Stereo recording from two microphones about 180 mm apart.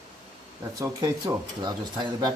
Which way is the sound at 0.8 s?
20° right (ahead or behind).